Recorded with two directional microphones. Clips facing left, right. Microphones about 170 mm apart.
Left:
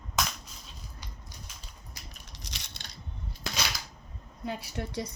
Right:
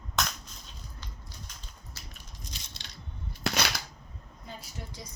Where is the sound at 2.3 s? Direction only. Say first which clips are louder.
Left 1 dB; 75° left (ahead or behind).